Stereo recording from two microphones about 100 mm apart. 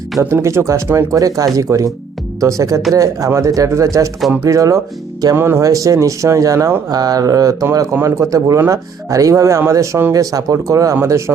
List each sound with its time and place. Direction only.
0.2 s speech: 30° right (ahead or behind)